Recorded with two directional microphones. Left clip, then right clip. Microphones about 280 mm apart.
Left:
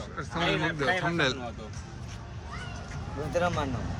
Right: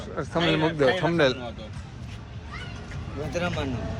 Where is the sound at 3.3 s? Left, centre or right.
Centre.